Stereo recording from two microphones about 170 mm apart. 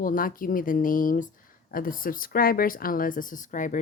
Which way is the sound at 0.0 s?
55° left (ahead or behind).